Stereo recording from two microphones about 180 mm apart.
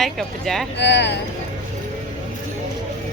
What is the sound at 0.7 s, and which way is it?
Speech, 75° left (ahead or behind).